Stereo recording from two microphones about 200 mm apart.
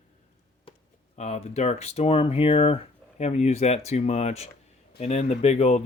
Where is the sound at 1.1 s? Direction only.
30° left (ahead or behind).